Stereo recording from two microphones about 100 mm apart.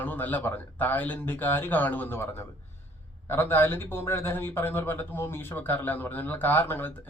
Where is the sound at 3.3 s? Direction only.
20° left (ahead or behind).